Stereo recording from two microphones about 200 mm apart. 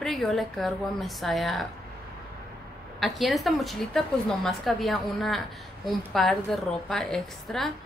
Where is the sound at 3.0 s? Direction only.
Centre (ahead or behind).